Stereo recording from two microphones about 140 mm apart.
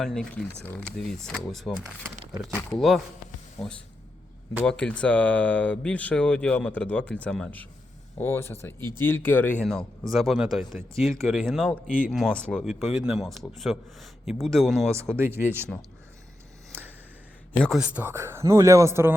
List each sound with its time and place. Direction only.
0.0 s a man's voice: 5° left (ahead or behind)
3.6 s speech: 20° left (ahead or behind)
4.6 s speech: 5° left (ahead or behind)
9.6 s a man's voice: centre (ahead or behind)
15.1 s speech: 15° right (ahead or behind)
17.6 s a man's voice: centre (ahead or behind)
17.8 s speech: 10° right (ahead or behind)